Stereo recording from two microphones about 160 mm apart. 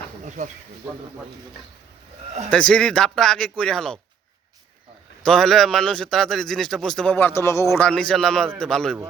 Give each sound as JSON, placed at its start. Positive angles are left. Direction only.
{"t": 2.5, "sound": "a man's voice", "side_deg": 5}
{"t": 5.2, "sound": "a man's voice", "side_deg": 5}
{"t": 7.9, "sound": "a man's voice", "side_deg": 5}